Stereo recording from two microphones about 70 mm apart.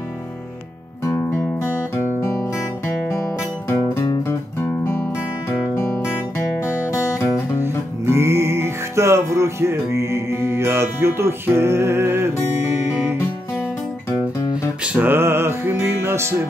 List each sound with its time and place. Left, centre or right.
4.1 s music: left
6.6 s music: left
7.6 s music: right
14.8 s music: centre
15.0 s music: right